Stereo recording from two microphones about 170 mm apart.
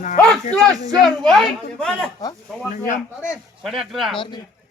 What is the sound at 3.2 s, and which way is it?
Speech, 5° right (ahead or behind).